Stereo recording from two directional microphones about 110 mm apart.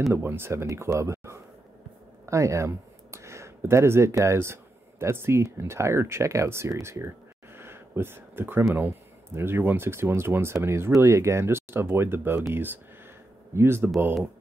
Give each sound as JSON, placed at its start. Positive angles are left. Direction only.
{"t": 0.1, "sound": "speech", "side_deg": -20}